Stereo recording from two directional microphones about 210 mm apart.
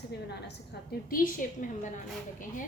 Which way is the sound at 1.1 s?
40° left (ahead or behind).